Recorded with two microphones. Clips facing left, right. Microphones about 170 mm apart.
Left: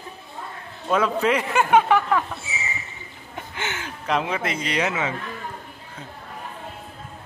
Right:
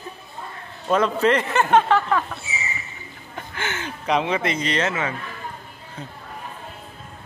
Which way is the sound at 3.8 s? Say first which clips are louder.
Right 3 dB; centre (ahead or behind).